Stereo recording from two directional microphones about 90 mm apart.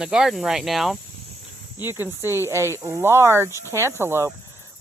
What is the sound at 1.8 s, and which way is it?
Speech, 25° right (ahead or behind).